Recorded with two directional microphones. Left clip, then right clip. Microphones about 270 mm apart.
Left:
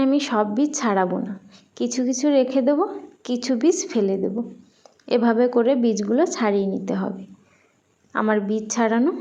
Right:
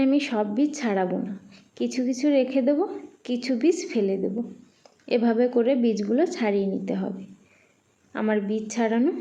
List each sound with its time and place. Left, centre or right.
0.0 s a woman's voice: centre
8.1 s a woman's voice: centre